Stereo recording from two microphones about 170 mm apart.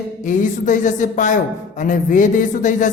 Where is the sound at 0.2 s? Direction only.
50° left (ahead or behind).